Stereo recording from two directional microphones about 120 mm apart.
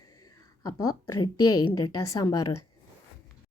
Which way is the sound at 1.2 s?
35° left (ahead or behind).